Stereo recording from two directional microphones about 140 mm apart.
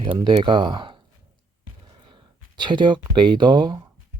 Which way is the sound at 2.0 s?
35° right (ahead or behind).